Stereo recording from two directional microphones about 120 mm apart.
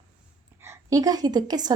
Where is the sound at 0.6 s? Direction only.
25° right (ahead or behind).